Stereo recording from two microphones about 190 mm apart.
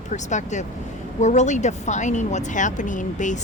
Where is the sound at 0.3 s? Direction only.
40° left (ahead or behind).